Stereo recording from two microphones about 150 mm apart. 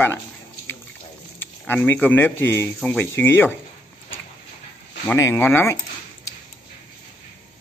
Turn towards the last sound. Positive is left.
turn(degrees=15)  # may be behind; listen again after turning